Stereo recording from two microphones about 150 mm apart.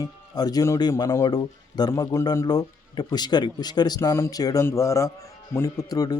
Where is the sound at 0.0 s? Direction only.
25° left (ahead or behind).